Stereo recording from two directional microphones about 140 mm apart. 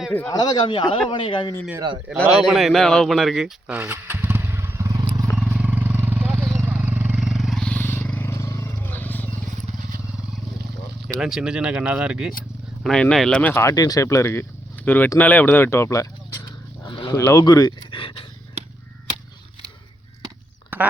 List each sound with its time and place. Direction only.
0.3 s a man's voice: 30° left (ahead or behind)
2.2 s speech: 5° right (ahead or behind); by 5.3 s 25° right (ahead or behind)
5.4 s vehicle: 10° right (ahead or behind); by 9.2 s 15° left (ahead or behind)
11.2 s speech: 5° right (ahead or behind)
12.8 s speech: 5° left (ahead or behind); by 16.0 s 20° left (ahead or behind)
16.8 s dog: 35° left (ahead or behind)
17.2 s speech: 20° left (ahead or behind)
17.9 s a man's voice: 40° left (ahead or behind)